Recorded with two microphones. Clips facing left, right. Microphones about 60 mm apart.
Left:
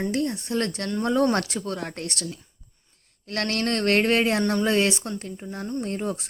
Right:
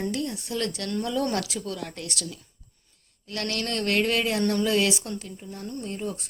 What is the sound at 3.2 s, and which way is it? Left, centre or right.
A woman's voice, left.